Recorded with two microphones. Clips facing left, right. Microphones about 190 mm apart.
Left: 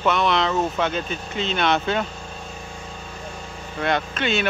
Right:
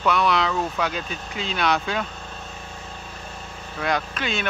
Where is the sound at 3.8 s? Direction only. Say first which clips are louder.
Left 2 dB; centre (ahead or behind).